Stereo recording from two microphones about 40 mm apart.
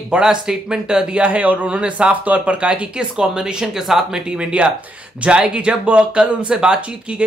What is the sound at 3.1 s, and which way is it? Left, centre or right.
Speech, centre.